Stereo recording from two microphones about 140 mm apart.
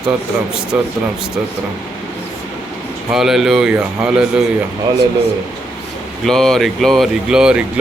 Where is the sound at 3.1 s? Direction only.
Centre (ahead or behind).